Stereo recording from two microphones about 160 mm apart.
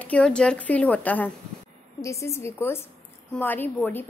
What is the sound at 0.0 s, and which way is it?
A woman's voice, 5° left (ahead or behind).